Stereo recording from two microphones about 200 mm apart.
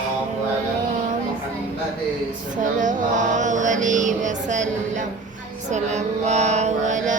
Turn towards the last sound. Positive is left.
turn(degrees=-40)  # may be behind; listen again after turning